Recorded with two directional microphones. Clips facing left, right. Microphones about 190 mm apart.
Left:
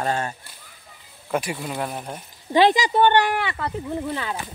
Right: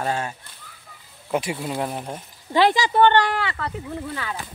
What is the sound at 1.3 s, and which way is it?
Speech, 20° right (ahead or behind).